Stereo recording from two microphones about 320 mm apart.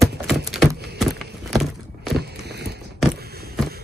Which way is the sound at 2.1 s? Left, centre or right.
Right.